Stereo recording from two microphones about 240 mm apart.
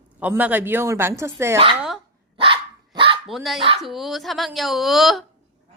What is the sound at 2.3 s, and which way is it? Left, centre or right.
Dog, right.